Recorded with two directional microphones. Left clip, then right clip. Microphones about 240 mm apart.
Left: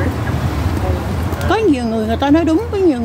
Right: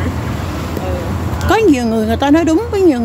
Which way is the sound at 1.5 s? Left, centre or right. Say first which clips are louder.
Right 3 dB; centre.